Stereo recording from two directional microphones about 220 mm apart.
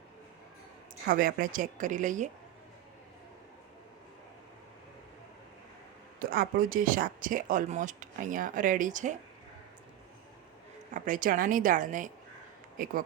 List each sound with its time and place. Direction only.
1.0 s speech: 40° right (ahead or behind)
6.1 s speech: 40° right (ahead or behind)
10.9 s speech: 35° right (ahead or behind)